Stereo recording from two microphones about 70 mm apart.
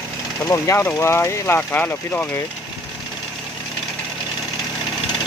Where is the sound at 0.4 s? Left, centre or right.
Left.